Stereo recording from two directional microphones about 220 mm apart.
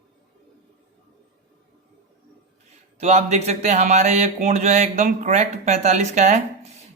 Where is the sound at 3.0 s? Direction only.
30° right (ahead or behind).